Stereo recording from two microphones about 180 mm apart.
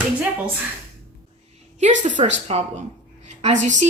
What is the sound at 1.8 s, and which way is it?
A woman's voice, 40° right (ahead or behind).